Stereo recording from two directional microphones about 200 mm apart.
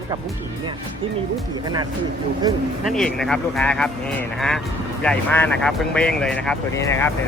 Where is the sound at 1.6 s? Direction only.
20° right (ahead or behind).